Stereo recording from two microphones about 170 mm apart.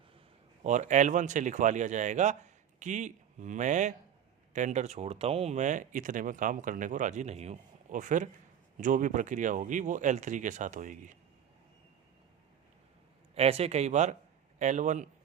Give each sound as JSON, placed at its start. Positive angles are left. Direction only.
{"t": 0.6, "sound": "speech", "side_deg": -45}
{"t": 13.3, "sound": "speech", "side_deg": -35}